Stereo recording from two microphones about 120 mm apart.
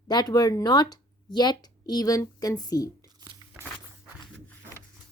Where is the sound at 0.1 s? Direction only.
35° left (ahead or behind).